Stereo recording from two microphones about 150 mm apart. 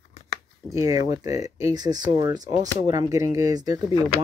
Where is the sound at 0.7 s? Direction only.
25° right (ahead or behind).